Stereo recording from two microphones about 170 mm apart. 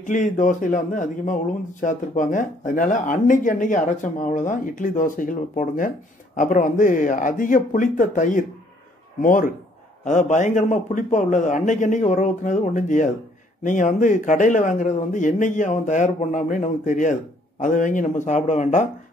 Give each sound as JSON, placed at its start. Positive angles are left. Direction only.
{"t": 0.0, "sound": "a man's voice", "side_deg": 50}